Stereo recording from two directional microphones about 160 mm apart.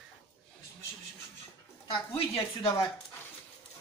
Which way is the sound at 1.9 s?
35° left (ahead or behind).